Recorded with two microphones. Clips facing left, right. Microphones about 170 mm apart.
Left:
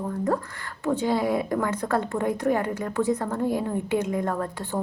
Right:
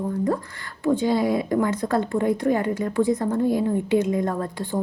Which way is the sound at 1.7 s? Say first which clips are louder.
Right 3 dB; 35° right (ahead or behind).